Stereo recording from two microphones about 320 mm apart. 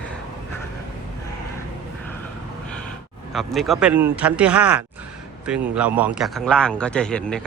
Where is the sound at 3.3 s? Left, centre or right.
Centre.